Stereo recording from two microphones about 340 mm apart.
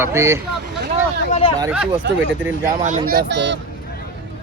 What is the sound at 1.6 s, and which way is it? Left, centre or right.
Speech, centre.